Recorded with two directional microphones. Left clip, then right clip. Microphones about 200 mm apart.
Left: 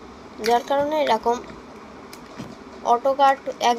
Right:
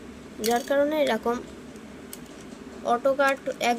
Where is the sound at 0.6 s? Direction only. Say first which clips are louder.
Left 3 dB; 70° right (ahead or behind).